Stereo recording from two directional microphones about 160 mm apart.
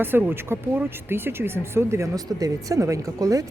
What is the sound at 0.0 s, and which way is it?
Speech, 15° right (ahead or behind).